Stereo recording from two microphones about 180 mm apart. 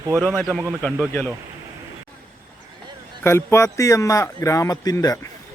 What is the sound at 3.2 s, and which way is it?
Speech, 15° left (ahead or behind).